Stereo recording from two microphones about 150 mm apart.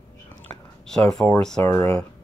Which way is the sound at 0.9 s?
5° left (ahead or behind).